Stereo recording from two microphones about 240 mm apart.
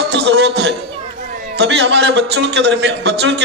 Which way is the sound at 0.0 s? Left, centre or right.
Right.